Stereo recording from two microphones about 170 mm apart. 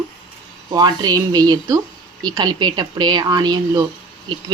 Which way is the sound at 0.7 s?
25° right (ahead or behind).